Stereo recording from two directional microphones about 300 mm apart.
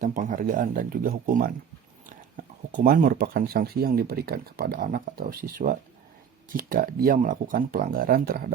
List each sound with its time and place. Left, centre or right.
0.0 s speech: right